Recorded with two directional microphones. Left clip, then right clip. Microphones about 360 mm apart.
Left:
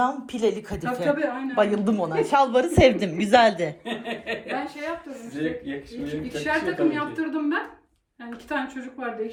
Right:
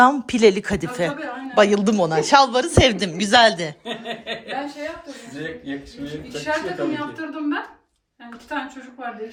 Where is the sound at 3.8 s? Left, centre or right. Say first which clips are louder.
Right 1 dB; right.